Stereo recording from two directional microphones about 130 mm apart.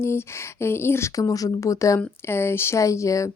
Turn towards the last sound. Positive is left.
turn(degrees=25)  # may be behind; listen again after turning